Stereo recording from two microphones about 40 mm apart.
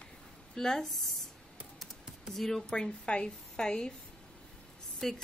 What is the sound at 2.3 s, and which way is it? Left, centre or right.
Speech, centre.